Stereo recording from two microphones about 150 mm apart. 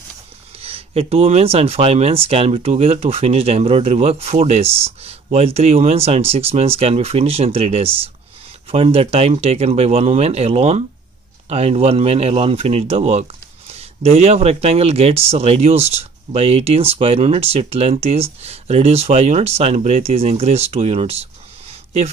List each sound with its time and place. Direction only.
0.6 s speech: 40° right (ahead or behind)